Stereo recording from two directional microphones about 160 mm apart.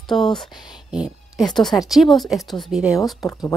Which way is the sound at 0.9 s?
5° right (ahead or behind).